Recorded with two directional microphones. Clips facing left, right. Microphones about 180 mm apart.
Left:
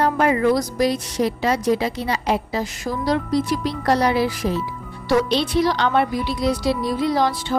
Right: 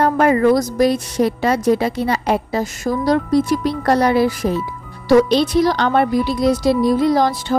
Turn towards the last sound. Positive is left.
turn(degrees=-45)  # may be behind; listen again after turning